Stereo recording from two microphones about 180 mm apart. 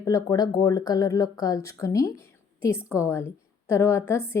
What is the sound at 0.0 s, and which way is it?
Speech, 20° left (ahead or behind).